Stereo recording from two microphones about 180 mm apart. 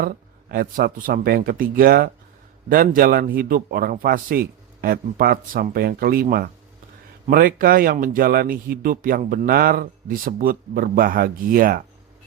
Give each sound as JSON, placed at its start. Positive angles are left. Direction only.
{"t": 0.0, "sound": "speech", "side_deg": -55}